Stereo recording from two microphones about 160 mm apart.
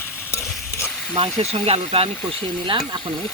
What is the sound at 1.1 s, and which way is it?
Speech, 35° right (ahead or behind).